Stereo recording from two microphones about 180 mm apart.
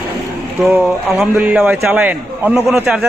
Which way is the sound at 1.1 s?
5° right (ahead or behind).